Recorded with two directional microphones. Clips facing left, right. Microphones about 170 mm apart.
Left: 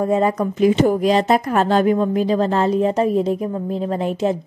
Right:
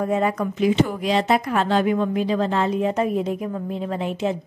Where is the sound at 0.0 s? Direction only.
30° left (ahead or behind).